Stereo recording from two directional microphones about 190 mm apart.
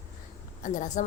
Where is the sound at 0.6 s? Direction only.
40° left (ahead or behind).